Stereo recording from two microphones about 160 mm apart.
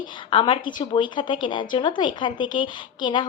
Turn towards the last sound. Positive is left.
turn(degrees=30)  # may be behind; listen again after turning